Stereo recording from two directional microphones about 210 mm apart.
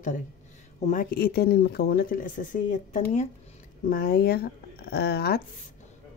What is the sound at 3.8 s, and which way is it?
A woman's voice, 45° left (ahead or behind).